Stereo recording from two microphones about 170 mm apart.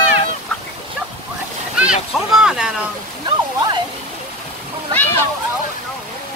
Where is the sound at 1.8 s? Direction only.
5° right (ahead or behind).